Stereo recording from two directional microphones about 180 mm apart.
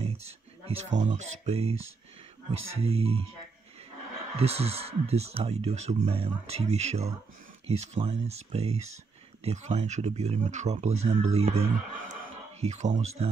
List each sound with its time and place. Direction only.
0.0 s speech: 35° right (ahead or behind)
2.8 s speech: 35° right (ahead or behind)
4.4 s speech: 35° right (ahead or behind)